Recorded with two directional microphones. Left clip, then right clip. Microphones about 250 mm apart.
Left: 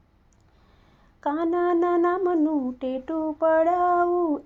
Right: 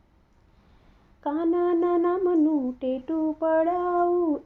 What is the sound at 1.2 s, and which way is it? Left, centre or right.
Female singing, left.